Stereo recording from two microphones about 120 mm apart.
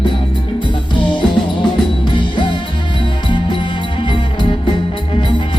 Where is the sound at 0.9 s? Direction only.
45° left (ahead or behind).